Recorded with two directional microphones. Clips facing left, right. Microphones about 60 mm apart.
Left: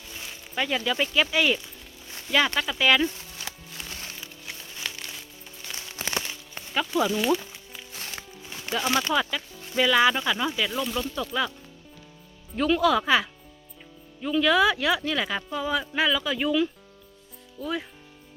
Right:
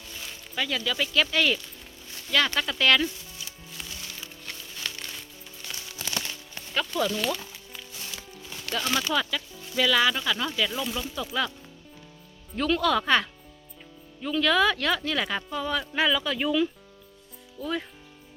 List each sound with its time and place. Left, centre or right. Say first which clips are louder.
0.1 s speech: left 2 dB; centre
3.5 s music: left 7 dB; left
3.8 s music: left 4 dB; left
4.2 s music: even; centre
5.7 s music: left 3 dB; left
6.2 s music: left 1 dB; centre
9.7 s speech: left 3 dB; centre
10.7 s speech: left 3 dB; centre
12.5 s speech: left 2 dB; centre